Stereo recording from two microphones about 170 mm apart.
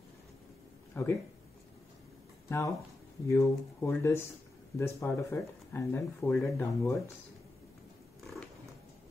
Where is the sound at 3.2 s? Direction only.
15° left (ahead or behind).